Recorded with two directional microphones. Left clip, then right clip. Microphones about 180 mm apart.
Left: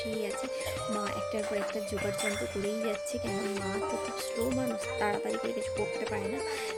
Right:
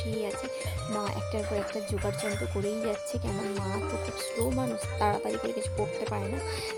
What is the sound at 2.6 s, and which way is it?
Speech, centre (ahead or behind).